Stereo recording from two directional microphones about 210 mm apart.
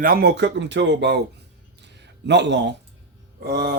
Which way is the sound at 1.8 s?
55° right (ahead or behind).